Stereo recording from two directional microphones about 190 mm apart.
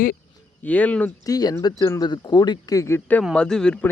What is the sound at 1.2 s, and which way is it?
Speech, 20° left (ahead or behind).